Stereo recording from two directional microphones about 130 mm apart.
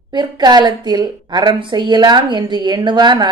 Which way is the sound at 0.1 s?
35° right (ahead or behind).